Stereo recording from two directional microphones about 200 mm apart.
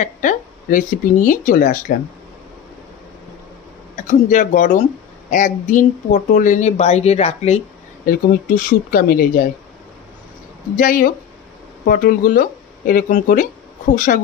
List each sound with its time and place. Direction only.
0.0 s speech: 40° left (ahead or behind)
3.9 s speech: 40° left (ahead or behind)
8.0 s speech: 45° left (ahead or behind)
10.8 s speech: 45° left (ahead or behind)